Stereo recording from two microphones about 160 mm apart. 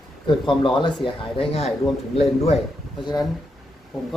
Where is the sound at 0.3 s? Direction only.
30° left (ahead or behind).